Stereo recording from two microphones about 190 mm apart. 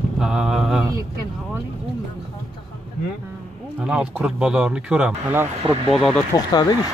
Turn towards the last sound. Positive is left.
turn(degrees=20)  # may be behind; listen again after turning